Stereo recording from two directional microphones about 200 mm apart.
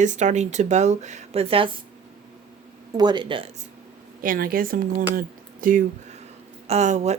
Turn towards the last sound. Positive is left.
turn(degrees=-35)  # may be behind; listen again after turning